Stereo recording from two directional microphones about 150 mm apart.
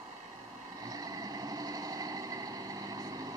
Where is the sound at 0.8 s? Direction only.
25° right (ahead or behind).